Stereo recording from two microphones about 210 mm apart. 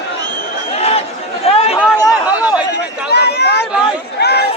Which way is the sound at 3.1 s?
50° left (ahead or behind).